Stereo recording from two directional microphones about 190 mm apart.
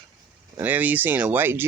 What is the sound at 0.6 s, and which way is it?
Speech, 10° right (ahead or behind).